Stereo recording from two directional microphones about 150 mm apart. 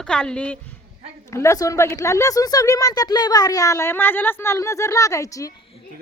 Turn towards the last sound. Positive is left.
turn(degrees=20)  # may be behind; listen again after turning